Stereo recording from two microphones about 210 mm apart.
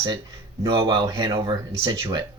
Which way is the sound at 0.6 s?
20° right (ahead or behind).